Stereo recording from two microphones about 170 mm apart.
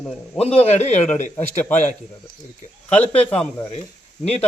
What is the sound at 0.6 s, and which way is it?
A man's voice, 40° left (ahead or behind).